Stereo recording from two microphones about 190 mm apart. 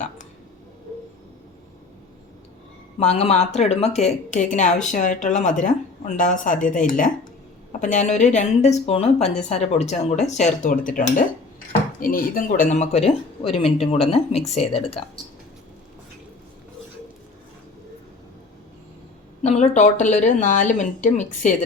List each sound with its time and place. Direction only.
3.0 s speech: 35° left (ahead or behind)
19.4 s speech: 35° left (ahead or behind)